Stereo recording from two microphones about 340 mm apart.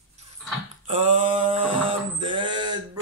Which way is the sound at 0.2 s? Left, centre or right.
Centre.